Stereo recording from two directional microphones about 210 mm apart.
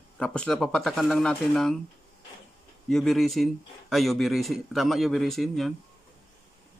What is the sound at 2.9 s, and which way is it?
Speech, centre (ahead or behind).